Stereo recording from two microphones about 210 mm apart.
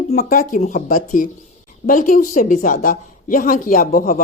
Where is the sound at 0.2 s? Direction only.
40° left (ahead or behind).